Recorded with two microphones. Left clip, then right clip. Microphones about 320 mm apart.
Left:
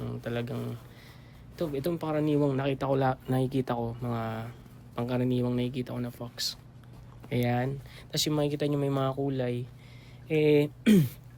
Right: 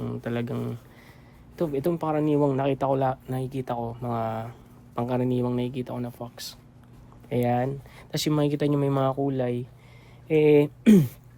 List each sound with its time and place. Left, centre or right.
0.0 s speech: centre